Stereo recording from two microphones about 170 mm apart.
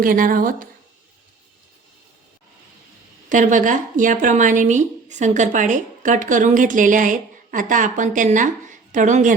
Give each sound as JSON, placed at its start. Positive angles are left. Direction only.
{"t": 0.0, "sound": "a woman's voice", "side_deg": -55}
{"t": 3.2, "sound": "speech", "side_deg": -50}